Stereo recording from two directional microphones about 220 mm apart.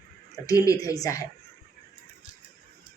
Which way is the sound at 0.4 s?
15° left (ahead or behind).